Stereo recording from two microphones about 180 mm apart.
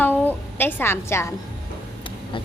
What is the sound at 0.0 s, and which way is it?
A woman's voice, 10° left (ahead or behind).